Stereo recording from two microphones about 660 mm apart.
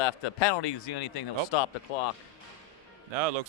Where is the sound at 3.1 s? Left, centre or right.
Right.